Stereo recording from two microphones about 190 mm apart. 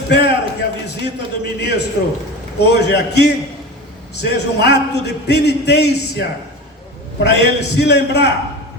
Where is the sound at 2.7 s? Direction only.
60° left (ahead or behind).